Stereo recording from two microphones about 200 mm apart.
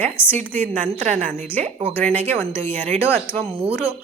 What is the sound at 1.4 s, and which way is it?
Speech, 10° left (ahead or behind).